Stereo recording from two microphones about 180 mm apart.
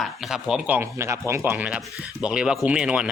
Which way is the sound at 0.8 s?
15° right (ahead or behind).